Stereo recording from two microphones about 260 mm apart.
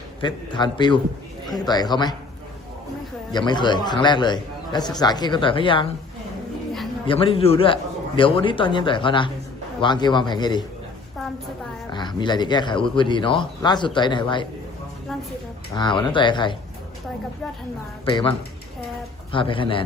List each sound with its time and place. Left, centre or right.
0.2 s speech: centre
3.3 s a man's voice: centre
7.1 s a man's voice: left
11.9 s speech: centre
15.7 s speech: centre
18.0 s a man's voice: centre